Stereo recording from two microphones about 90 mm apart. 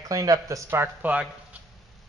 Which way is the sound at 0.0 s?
40° right (ahead or behind).